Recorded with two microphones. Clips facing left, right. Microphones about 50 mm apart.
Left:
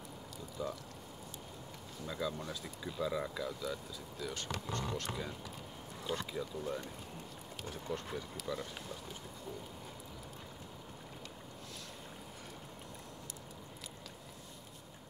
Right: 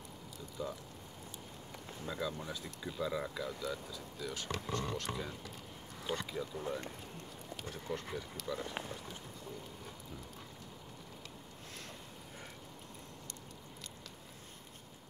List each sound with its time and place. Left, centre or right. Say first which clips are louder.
0.6 s speech: left 1 dB; centre
2.0 s speech: even; centre
7.7 s speech: left 1 dB; centre
8.6 s speech: right 4 dB; right